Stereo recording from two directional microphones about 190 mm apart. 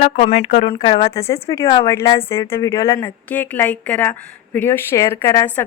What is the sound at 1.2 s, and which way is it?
A woman's voice, 15° left (ahead or behind).